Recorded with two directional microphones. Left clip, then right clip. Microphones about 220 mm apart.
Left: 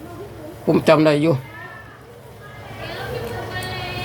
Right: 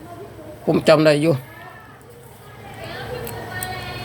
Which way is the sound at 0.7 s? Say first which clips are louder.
Even; 10° right (ahead or behind).